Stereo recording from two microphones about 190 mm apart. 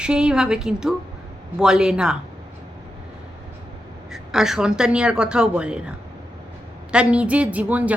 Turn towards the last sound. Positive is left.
turn(degrees=-10)  # may be behind; listen again after turning